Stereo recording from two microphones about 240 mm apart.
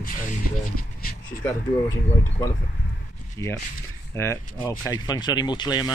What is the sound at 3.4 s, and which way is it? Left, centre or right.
Speech, centre.